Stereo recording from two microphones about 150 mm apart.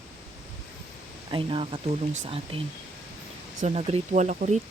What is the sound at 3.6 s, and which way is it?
Speech, 45° right (ahead or behind).